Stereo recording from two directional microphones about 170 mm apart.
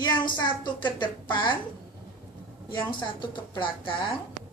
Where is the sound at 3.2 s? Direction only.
30° left (ahead or behind).